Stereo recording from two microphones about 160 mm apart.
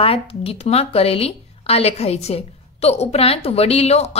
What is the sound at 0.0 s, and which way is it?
A woman's voice, 35° left (ahead or behind).